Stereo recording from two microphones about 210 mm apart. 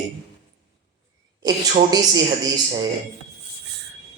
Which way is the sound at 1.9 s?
20° right (ahead or behind).